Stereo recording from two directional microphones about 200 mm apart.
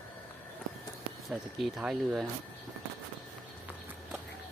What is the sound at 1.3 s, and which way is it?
Speech, centre (ahead or behind).